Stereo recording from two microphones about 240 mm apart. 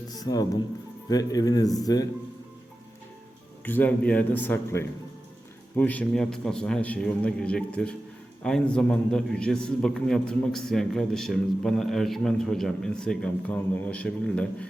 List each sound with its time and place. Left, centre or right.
0.1 s speech: centre
3.7 s a man's voice: centre